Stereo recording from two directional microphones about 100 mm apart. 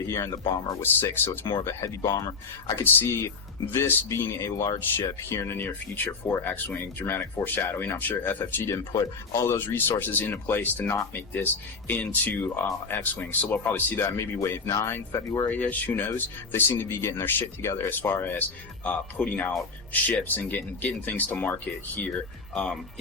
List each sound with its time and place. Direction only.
0.0 s speech: 30° left (ahead or behind)
2.8 s speech: 20° left (ahead or behind)
15.4 s speech: 15° left (ahead or behind)